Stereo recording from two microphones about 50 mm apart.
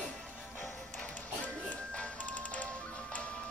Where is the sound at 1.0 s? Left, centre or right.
Left.